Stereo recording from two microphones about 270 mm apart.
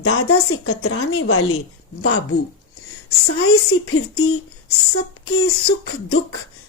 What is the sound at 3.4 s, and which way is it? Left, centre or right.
Speech, left.